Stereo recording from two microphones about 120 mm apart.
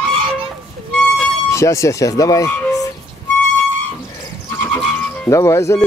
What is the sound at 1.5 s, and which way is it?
Speech, 25° left (ahead or behind).